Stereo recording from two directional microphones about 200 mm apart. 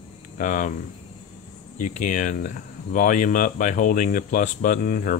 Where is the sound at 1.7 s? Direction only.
40° left (ahead or behind).